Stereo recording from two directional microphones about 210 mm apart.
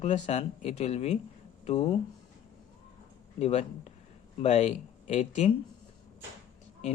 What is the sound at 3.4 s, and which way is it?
Speech, 30° left (ahead or behind).